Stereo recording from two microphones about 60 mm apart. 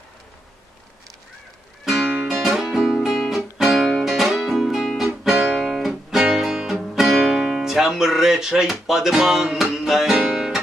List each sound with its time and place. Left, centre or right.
1.9 s music: centre
2.1 s music: centre
2.4 s music: centre